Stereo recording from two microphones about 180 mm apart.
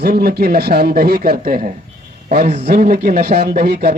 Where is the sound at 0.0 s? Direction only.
60° right (ahead or behind).